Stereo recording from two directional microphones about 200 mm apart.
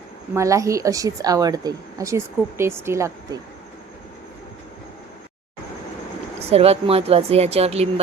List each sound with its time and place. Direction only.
0.3 s a woman's voice: 15° right (ahead or behind)
6.4 s speech: 30° right (ahead or behind)